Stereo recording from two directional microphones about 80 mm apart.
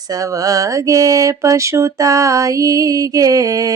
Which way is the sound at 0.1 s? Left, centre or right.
Right.